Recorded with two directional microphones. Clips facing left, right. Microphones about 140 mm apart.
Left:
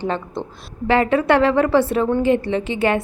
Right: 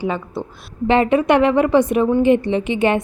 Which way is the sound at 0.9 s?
20° right (ahead or behind).